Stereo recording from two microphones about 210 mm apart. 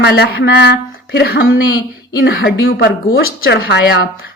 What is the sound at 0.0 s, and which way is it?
Speech, 50° left (ahead or behind).